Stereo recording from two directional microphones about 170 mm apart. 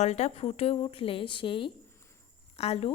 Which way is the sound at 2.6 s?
35° left (ahead or behind).